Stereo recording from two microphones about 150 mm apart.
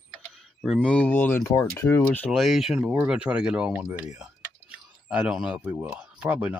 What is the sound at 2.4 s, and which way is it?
Speech, centre (ahead or behind).